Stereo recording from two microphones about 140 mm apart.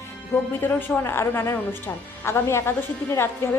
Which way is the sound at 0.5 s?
15° left (ahead or behind).